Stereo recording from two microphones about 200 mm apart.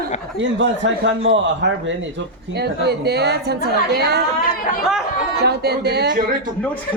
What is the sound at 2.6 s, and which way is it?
A woman's voice, 55° right (ahead or behind).